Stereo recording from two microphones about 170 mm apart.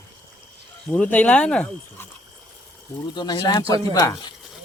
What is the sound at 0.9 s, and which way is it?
Speech, 10° left (ahead or behind).